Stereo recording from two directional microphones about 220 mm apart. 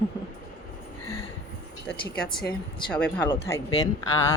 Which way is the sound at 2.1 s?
5° left (ahead or behind).